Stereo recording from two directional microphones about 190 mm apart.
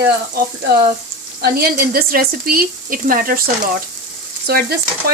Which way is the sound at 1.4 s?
55° right (ahead or behind).